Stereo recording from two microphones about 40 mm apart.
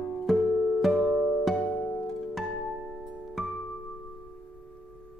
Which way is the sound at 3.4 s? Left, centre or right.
Centre.